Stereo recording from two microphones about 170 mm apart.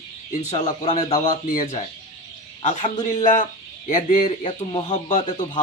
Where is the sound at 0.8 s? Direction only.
45° left (ahead or behind).